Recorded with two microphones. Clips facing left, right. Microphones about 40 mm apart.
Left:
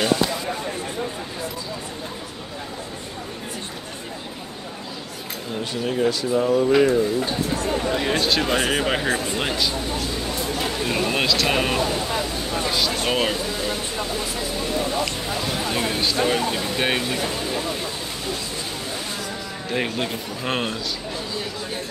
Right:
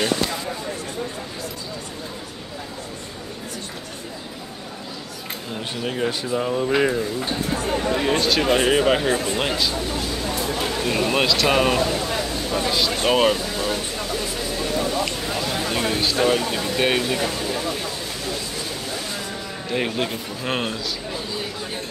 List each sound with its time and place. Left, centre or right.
5.9 s speech: centre
7.9 s speech: centre
10.8 s speech: centre
15.6 s speech: centre
19.7 s speech: centre